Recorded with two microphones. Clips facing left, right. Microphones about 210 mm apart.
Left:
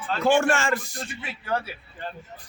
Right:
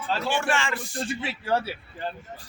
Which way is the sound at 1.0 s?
30° right (ahead or behind).